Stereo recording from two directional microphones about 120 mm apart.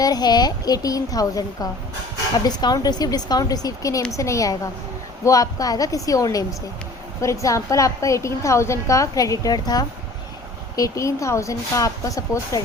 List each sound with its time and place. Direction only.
0.0 s a woman's voice: 35° left (ahead or behind)